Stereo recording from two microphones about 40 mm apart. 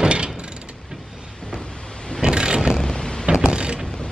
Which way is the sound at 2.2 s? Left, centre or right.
Right.